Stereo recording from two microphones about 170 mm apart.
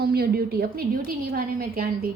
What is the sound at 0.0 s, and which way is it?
A woman's voice, 65° right (ahead or behind).